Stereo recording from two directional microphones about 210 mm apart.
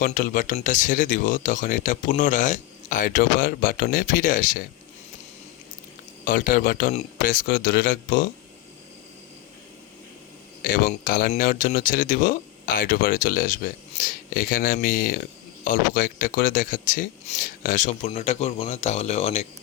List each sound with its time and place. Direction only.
0.0 s speech: 40° left (ahead or behind)
6.2 s speech: 40° left (ahead or behind)
10.6 s speech: 45° left (ahead or behind)